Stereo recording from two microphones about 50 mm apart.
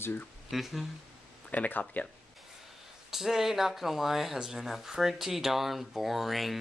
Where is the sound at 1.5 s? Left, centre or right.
Left.